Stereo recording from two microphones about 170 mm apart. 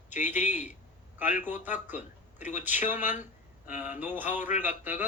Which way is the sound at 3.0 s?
45° left (ahead or behind).